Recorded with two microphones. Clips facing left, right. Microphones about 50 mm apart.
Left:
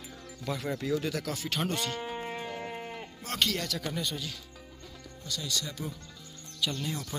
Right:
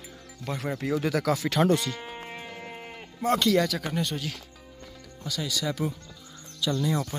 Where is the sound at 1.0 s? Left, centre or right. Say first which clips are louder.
Right 6 dB; right.